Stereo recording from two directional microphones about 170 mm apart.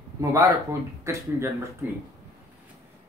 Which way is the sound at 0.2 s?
20° right (ahead or behind).